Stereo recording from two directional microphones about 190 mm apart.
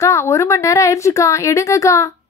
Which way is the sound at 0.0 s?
15° left (ahead or behind).